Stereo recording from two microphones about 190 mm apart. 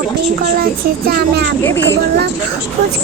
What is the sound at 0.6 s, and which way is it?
Speech, 50° right (ahead or behind).